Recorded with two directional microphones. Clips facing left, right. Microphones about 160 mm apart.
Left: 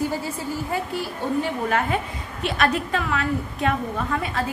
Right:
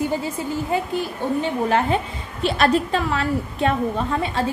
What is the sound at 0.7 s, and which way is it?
A woman's voice, 20° right (ahead or behind).